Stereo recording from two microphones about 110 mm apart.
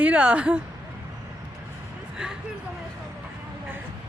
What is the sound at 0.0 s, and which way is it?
Speech, 10° right (ahead or behind).